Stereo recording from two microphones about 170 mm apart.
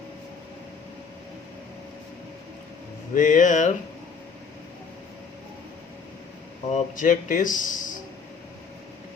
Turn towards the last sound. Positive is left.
turn(degrees=50)  # may be behind; listen again after turning